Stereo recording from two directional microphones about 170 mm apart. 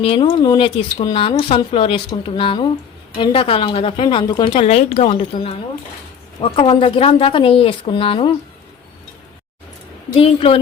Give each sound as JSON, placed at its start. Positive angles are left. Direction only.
{"t": 0.0, "sound": "a woman's voice", "side_deg": 30}
{"t": 4.6, "sound": "a woman's voice", "side_deg": 40}
{"t": 10.2, "sound": "a woman's voice", "side_deg": 35}